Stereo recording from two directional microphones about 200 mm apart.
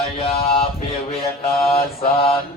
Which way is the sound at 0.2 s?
30° left (ahead or behind).